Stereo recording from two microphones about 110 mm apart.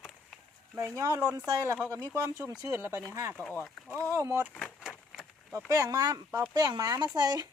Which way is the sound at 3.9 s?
30° right (ahead or behind).